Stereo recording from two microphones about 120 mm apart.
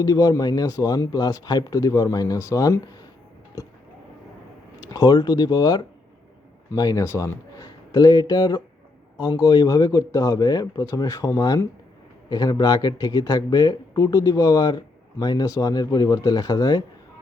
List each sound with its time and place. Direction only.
0.0 s speech: 30° left (ahead or behind)
4.8 s speech: 30° left (ahead or behind)